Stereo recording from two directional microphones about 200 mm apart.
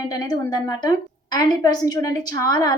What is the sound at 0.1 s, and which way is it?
A woman's voice, 20° left (ahead or behind).